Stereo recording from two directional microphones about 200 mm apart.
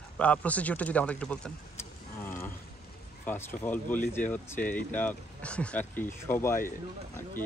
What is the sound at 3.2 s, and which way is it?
Speech, 10° left (ahead or behind).